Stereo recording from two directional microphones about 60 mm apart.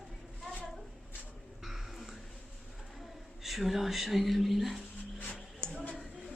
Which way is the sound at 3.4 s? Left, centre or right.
Centre.